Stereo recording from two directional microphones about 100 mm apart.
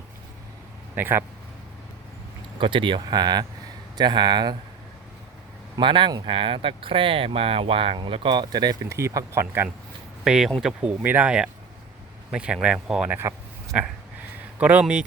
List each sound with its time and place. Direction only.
0.9 s speech: 20° right (ahead or behind)
2.6 s speech: 55° right (ahead or behind)
5.7 s speech: 55° right (ahead or behind)
7.9 s speech: 55° right (ahead or behind)
8.9 s speech: 30° right (ahead or behind)
10.2 s speech: 5° right (ahead or behind)
11.0 s speech: 15° right (ahead or behind)
13.1 s speech: 20° right (ahead or behind)
14.6 s speech: 15° right (ahead or behind)